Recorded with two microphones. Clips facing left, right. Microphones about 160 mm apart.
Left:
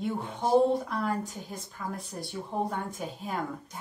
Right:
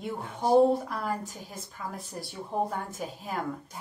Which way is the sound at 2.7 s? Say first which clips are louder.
Even; centre (ahead or behind).